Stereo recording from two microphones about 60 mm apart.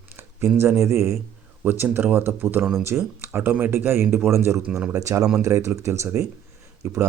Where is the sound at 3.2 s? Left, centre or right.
Right.